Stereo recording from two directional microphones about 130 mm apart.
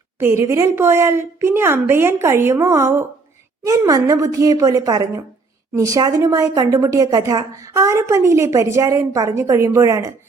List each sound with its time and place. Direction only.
0.2 s a woman's voice: 20° right (ahead or behind)